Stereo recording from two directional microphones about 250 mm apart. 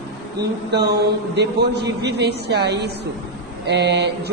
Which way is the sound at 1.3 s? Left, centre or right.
Right.